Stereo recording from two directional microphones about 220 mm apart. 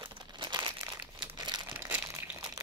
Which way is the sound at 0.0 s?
20° right (ahead or behind).